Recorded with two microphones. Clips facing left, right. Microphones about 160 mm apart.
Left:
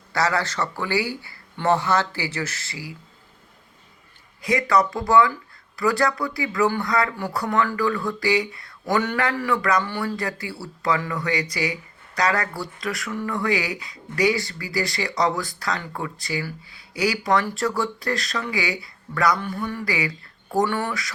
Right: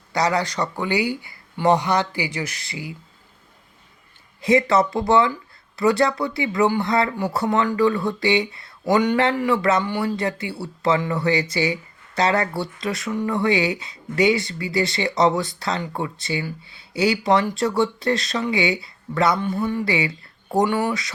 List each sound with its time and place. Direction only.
0.1 s speech: 20° right (ahead or behind)
4.4 s speech: 25° right (ahead or behind)